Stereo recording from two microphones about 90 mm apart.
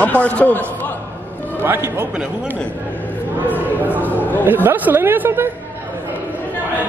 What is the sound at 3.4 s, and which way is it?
Speech, 20° right (ahead or behind).